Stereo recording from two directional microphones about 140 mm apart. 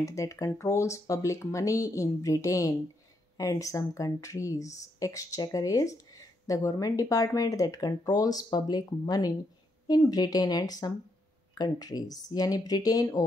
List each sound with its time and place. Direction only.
0.0 s speech: 20° left (ahead or behind)